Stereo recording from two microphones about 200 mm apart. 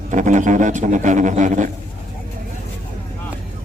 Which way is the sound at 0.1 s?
40° right (ahead or behind).